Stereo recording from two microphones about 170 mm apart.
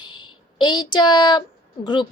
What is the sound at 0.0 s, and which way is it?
A woman's voice, 25° left (ahead or behind).